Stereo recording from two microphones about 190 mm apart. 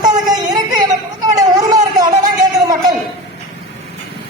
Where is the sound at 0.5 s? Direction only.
20° right (ahead or behind).